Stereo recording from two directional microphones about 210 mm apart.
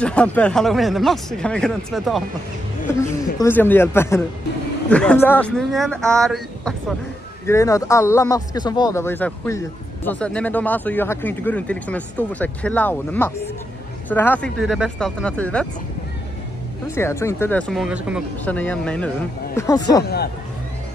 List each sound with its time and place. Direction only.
0.0 s speech: 5° left (ahead or behind)
2.9 s a man's voice: 10° left (ahead or behind)
7.4 s speech: 15° left (ahead or behind)
14.6 s speech: centre (ahead or behind)
16.8 s speech: 10° left (ahead or behind); by 18.2 s 5° right (ahead or behind)
18.4 s speech: 5° left (ahead or behind)
19.5 s speech: 15° left (ahead or behind)
20.0 s speech: 50° left (ahead or behind)